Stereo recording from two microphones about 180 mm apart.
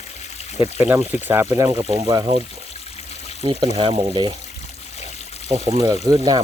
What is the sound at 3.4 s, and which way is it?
Speech, 25° right (ahead or behind).